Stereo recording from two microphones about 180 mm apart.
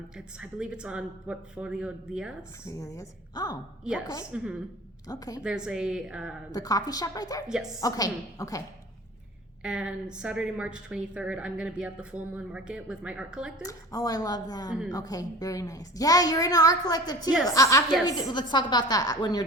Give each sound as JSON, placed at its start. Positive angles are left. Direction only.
{"t": 0.2, "sound": "a woman's voice", "side_deg": -5}
{"t": 2.6, "sound": "a woman's voice", "side_deg": 15}
{"t": 5.4, "sound": "a woman's voice", "side_deg": -5}
{"t": 6.5, "sound": "a woman's voice", "side_deg": 20}
{"t": 7.4, "sound": "a woman's voice", "side_deg": -5}
{"t": 7.8, "sound": "a woman's voice", "side_deg": 20}
{"t": 9.6, "sound": "a woman's voice", "side_deg": -5}
{"t": 13.6, "sound": "a woman's voice", "side_deg": 20}